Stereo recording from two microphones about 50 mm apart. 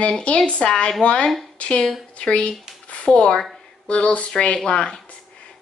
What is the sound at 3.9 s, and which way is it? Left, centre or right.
A woman's voice, left.